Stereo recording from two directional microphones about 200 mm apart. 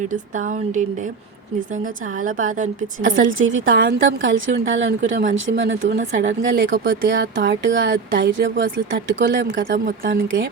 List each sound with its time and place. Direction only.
0.1 s a woman's voice: 40° right (ahead or behind)
3.1 s a woman's voice: 75° right (ahead or behind)
9.7 s speech: 45° right (ahead or behind)